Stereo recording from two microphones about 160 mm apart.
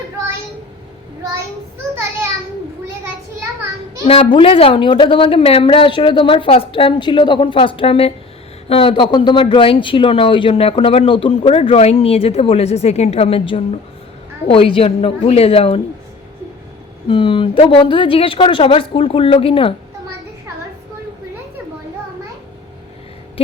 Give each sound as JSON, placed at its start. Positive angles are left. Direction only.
{"t": 4.0, "sound": "a man's voice", "side_deg": 35}
{"t": 17.1, "sound": "a man's voice", "side_deg": 30}